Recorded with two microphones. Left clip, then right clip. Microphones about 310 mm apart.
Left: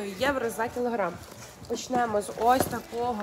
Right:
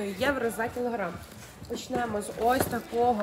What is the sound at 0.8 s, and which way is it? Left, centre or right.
Speech, centre.